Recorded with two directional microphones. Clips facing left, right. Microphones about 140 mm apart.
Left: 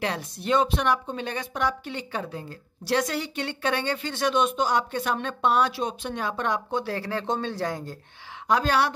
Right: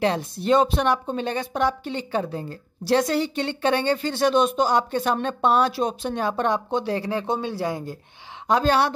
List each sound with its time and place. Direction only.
0.0 s a woman's voice: 30° right (ahead or behind); by 7.9 s 10° right (ahead or behind)
8.5 s speech: 30° right (ahead or behind)